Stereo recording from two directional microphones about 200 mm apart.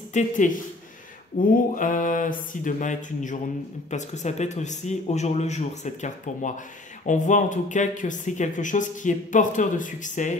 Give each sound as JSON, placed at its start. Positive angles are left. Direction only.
{"t": 0.2, "sound": "speech", "side_deg": 35}
{"t": 1.4, "sound": "speech", "side_deg": 40}